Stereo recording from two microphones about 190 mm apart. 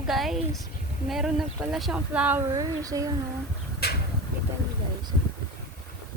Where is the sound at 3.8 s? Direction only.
55° left (ahead or behind).